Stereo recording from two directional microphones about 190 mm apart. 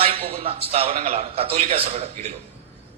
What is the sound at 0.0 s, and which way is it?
A man's voice, 30° right (ahead or behind).